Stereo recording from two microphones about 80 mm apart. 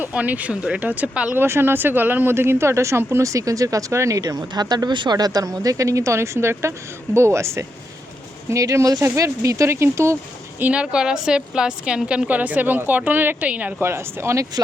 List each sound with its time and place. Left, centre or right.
0.0 s a woman's voice: centre
1.4 s speech: right
4.2 s speech: right
10.6 s a woman's voice: centre
13.8 s speech: right